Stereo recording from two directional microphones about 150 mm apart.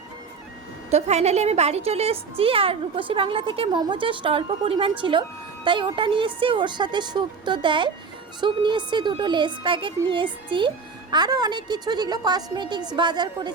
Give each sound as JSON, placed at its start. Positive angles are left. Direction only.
{"t": 0.9, "sound": "a woman's voice", "side_deg": -45}